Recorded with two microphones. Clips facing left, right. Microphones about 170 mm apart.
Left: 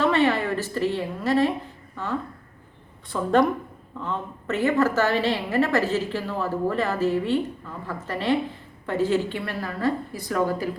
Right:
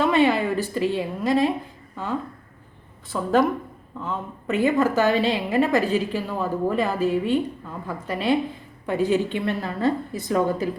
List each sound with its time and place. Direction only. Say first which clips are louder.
0.0 s a woman's voice: right 2 dB; 15° right (ahead or behind)
3.1 s a woman's voice: even; 5° right (ahead or behind)
4.0 s a woman's voice: right 1 dB; 15° right (ahead or behind)